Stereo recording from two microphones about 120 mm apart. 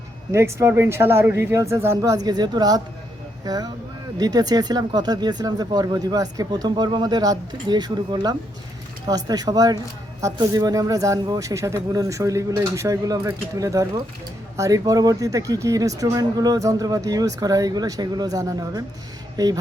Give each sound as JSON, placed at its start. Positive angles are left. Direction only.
{"t": 0.3, "sound": "speech", "side_deg": -25}